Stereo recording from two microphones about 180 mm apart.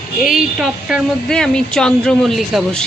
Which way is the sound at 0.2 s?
Centre (ahead or behind).